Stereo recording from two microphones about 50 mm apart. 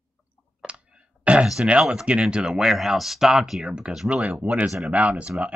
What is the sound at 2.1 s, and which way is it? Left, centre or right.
Speech, centre.